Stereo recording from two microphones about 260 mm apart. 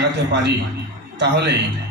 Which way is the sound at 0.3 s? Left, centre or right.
Right.